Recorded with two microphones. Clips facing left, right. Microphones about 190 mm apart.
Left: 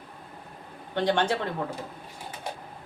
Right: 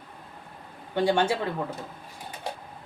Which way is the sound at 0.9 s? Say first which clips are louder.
Right 2 dB; 10° right (ahead or behind).